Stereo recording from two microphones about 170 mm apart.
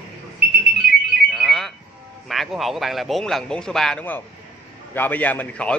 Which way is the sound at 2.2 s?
Centre (ahead or behind).